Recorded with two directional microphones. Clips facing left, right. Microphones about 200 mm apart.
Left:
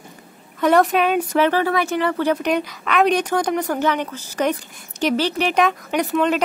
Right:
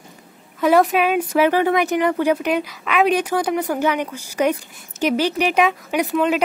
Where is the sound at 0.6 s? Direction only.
5° right (ahead or behind).